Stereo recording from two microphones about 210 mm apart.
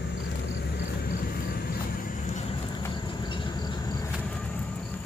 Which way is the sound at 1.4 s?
45° left (ahead or behind).